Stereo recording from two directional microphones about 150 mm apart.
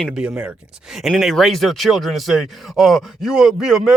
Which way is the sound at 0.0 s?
5° right (ahead or behind).